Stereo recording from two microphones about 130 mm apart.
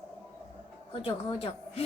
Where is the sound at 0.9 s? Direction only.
45° left (ahead or behind).